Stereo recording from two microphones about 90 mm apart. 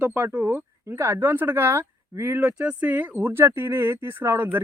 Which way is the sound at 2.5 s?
15° right (ahead or behind).